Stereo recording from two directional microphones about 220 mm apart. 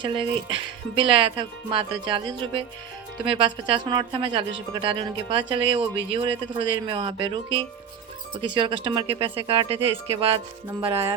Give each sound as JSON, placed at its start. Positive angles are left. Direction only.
{"t": 0.0, "sound": "speech", "side_deg": -25}